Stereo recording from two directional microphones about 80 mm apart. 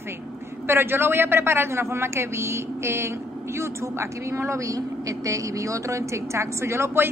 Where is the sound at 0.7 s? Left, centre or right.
Right.